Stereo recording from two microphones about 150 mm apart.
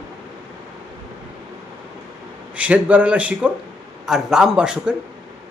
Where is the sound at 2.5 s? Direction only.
10° right (ahead or behind).